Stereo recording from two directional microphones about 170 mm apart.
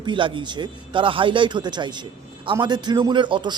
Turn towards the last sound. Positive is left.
turn(degrees=-30)  # may be behind; listen again after turning